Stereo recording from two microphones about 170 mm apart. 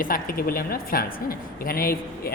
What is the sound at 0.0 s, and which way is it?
A woman's voice, 55° left (ahead or behind).